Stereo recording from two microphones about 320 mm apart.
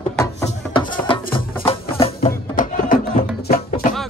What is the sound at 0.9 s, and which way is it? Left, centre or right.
Music, centre.